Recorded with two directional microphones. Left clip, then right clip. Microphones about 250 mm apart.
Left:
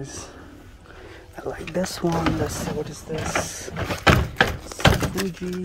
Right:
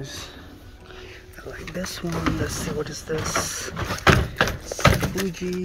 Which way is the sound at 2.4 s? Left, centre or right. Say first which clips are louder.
Left 1 dB; centre.